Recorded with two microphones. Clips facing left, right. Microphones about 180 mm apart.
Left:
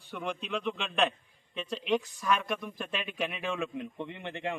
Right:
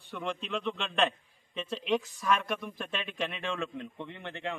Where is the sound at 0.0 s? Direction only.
Centre (ahead or behind).